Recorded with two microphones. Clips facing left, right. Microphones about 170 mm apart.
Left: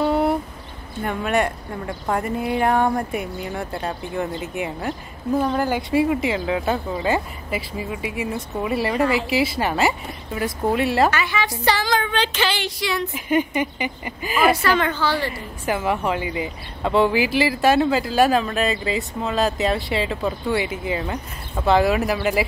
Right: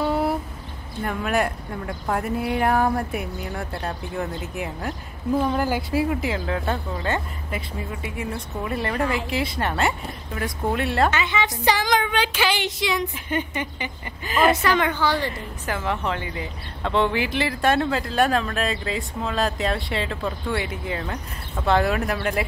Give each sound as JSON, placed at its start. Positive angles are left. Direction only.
{"t": 0.0, "sound": "a sound", "side_deg": 0}
{"t": 1.0, "sound": "speech", "side_deg": 0}
{"t": 11.1, "sound": "speech", "side_deg": -20}
{"t": 13.1, "sound": "a woman's voice", "side_deg": 10}
{"t": 14.8, "sound": "speech", "side_deg": -15}
{"t": 15.3, "sound": "speech", "side_deg": 10}